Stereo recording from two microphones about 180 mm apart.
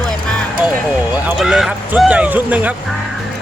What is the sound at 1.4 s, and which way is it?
Speech, centre (ahead or behind).